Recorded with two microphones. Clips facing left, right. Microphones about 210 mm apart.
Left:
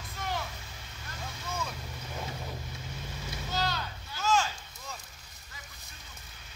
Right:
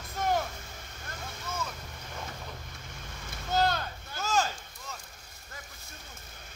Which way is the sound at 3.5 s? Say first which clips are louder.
Right 6 dB; 50° right (ahead or behind).